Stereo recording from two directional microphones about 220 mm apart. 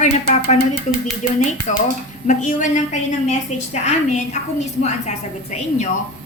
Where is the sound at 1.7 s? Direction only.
35° left (ahead or behind).